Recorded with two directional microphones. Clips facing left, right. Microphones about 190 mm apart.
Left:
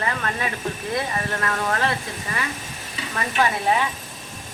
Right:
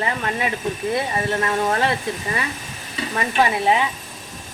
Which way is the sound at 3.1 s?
20° right (ahead or behind).